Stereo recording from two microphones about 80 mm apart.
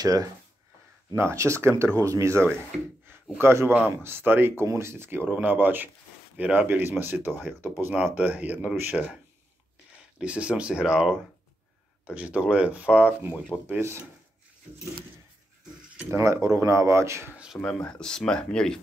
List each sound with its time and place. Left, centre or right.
0.0 s speech: right
1.1 s a man's voice: right; by 8.6 s centre
8.9 s speech: centre
10.1 s speech: centre
13.7 s a man's voice: right
16.1 s a man's voice: right
17.6 s speech: centre